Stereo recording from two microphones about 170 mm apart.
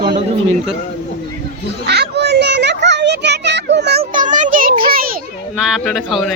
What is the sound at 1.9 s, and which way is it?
Children playing, 75° right (ahead or behind).